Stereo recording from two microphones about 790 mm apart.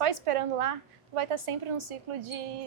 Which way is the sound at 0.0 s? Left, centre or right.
Right.